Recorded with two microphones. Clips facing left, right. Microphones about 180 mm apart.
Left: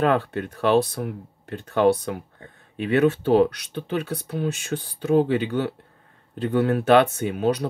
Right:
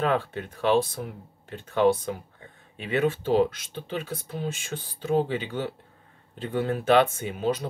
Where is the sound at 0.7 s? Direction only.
65° left (ahead or behind).